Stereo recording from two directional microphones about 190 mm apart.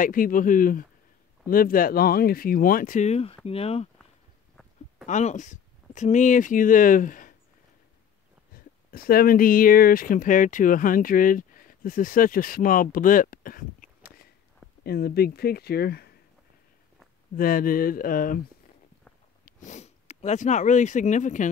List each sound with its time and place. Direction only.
0.0 s speech: 45° left (ahead or behind)
5.0 s speech: 40° left (ahead or behind)
8.9 s speech: 50° left (ahead or behind)
17.4 s speech: 50° left (ahead or behind)
19.4 s speech: 40° left (ahead or behind)